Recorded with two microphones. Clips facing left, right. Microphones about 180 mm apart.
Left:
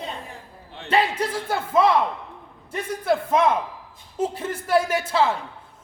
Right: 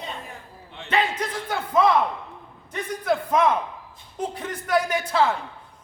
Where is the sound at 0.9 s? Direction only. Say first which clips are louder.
Left 3 dB; 30° left (ahead or behind).